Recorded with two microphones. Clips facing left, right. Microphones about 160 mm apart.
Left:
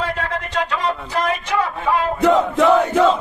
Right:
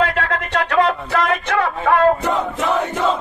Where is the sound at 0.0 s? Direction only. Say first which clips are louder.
Right 4 dB; 90° right; by 2.0 s 60° right (ahead or behind).